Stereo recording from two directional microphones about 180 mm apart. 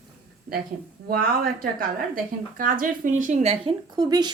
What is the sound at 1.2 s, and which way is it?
A woman's voice, 55° right (ahead or behind).